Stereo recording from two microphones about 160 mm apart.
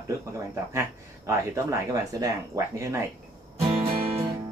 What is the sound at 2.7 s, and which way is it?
Speech, 15° right (ahead or behind).